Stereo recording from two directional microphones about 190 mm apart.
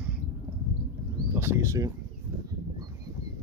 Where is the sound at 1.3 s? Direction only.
15° right (ahead or behind).